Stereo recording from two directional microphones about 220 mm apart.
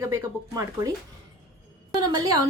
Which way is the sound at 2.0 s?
15° right (ahead or behind).